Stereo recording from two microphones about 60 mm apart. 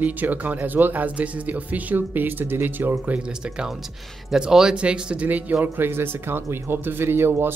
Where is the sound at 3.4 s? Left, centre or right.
Centre.